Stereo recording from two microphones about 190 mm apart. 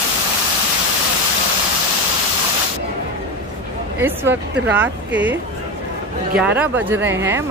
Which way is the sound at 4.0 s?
10° right (ahead or behind).